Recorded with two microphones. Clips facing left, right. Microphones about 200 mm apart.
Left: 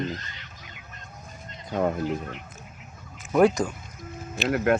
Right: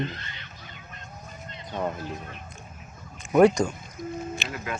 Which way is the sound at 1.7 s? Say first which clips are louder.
Left 5 dB; 50° left (ahead or behind).